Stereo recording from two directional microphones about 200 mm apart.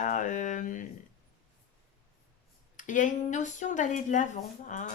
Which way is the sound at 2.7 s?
40° left (ahead or behind).